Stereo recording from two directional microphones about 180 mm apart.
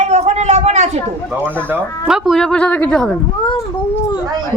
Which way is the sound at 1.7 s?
5° right (ahead or behind).